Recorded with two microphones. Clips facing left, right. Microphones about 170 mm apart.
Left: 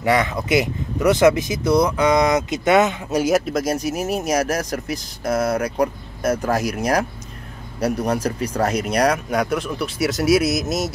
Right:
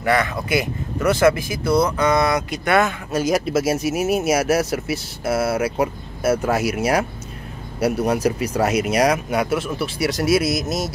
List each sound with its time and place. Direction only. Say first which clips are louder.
0.0 s speech: left 1 dB; 20° left (ahead or behind)
3.3 s speech: right 1 dB; 5° right (ahead or behind)